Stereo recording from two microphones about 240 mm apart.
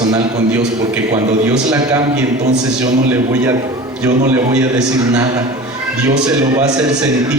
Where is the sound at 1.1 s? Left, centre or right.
Centre.